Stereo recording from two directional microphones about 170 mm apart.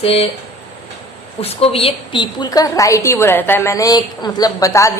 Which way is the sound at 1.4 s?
35° left (ahead or behind).